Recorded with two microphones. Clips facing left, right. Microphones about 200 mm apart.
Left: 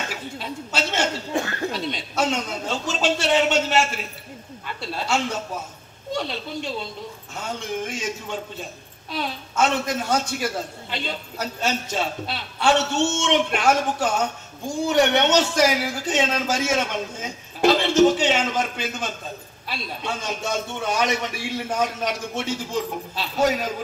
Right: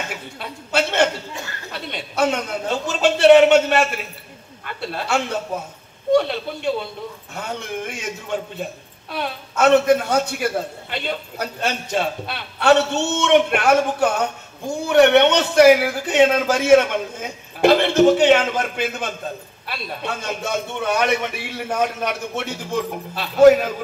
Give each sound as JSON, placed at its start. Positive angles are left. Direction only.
{"t": 0.4, "sound": "a man's voice", "side_deg": -60}
{"t": 1.3, "sound": "speech", "side_deg": 55}
{"t": 1.7, "sound": "a man's voice", "side_deg": -60}